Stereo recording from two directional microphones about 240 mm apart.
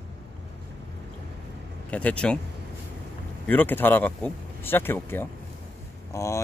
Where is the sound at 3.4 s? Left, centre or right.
Centre.